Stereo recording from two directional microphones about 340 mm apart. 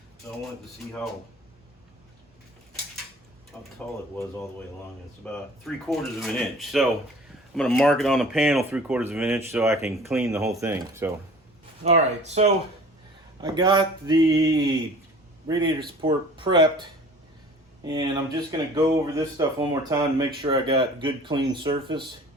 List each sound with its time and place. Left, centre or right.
3.5 s speech: centre
5.2 s speech: centre
11.8 s speech: centre
17.9 s speech: centre